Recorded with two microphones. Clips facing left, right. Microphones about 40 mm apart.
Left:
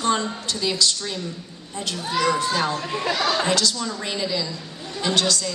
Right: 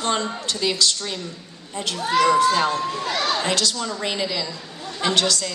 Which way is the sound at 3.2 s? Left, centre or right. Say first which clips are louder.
Even; centre.